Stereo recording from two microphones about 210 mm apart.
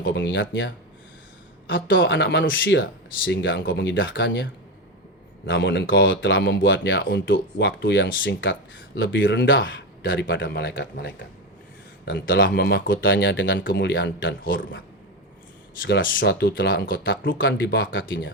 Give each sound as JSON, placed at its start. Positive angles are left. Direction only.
{"t": 0.0, "sound": "speech", "side_deg": 60}
{"t": 1.6, "sound": "speech", "side_deg": 65}
{"t": 5.5, "sound": "speech", "side_deg": 60}
{"t": 15.8, "sound": "speech", "side_deg": 60}